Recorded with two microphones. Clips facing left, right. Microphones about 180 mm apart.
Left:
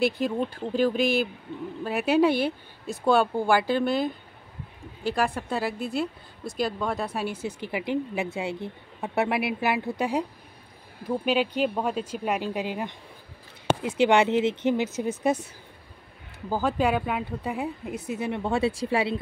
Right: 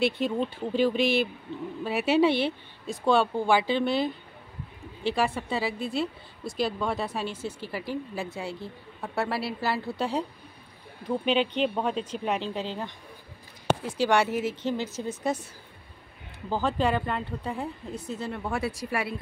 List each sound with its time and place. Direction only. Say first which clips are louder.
0.2 s speech: left 1 dB; centre (ahead or behind)
5.1 s speech: left 1 dB; centre (ahead or behind)
7.2 s a woman's voice: left 3 dB; 15° left (ahead or behind)
16.4 s a woman's voice: left 2 dB; 10° left (ahead or behind); by 19.1 s 25° left (ahead or behind)